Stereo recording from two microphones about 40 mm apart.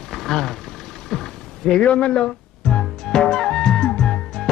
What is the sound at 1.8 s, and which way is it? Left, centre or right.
Speech, left.